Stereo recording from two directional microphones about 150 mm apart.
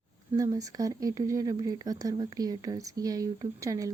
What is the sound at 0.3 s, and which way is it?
Speech, 25° right (ahead or behind).